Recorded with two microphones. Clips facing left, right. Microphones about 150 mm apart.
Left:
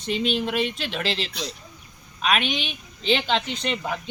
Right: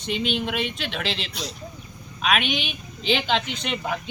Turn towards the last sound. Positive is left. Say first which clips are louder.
# left 1 dB
turn(degrees=0)  # may be behind; listen again after turning